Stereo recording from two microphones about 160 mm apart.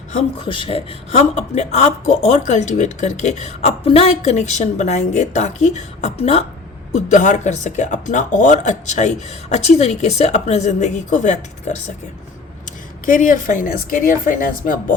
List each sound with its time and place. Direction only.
0.1 s speech: 45° left (ahead or behind)
0.4 s speech: 35° left (ahead or behind); by 11.8 s 50° left (ahead or behind)
13.1 s a woman's voice: 55° left (ahead or behind)